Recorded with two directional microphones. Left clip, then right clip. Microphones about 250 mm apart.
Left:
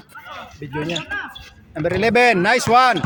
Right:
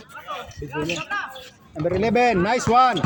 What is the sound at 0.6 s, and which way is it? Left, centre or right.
Speech, left.